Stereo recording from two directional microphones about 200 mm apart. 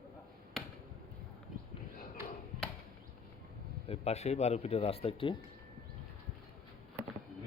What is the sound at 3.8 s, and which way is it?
Speech, 30° left (ahead or behind).